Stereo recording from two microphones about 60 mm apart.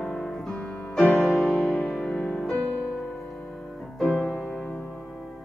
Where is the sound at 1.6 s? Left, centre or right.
Left.